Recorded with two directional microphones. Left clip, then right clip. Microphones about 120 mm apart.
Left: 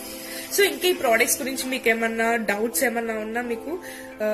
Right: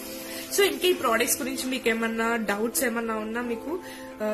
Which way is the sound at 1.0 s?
25° right (ahead or behind).